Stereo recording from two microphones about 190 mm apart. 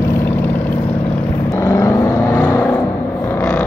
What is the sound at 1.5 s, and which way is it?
Vehicle, 15° left (ahead or behind).